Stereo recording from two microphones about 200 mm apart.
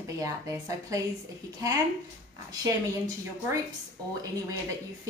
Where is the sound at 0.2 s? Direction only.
15° right (ahead or behind).